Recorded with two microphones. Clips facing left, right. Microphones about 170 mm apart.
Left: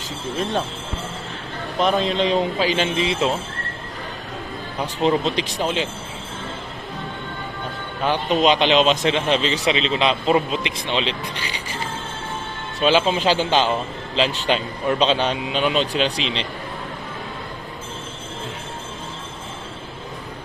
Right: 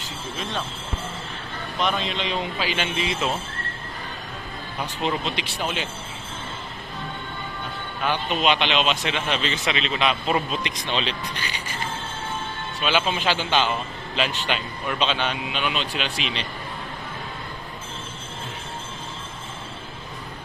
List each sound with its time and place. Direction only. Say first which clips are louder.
1.8 s a man's voice: left 7 dB; 40° left (ahead or behind)
4.8 s a man's voice: left 7 dB; 35° left (ahead or behind)
8.0 s a man's voice: left 5 dB; 35° left (ahead or behind)
12.8 s a man's voice: left 6 dB; 30° left (ahead or behind)